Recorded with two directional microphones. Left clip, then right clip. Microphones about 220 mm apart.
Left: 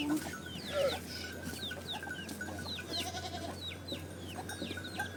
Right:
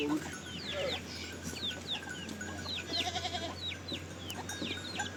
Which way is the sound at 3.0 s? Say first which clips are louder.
Right 4 dB; 35° right (ahead or behind).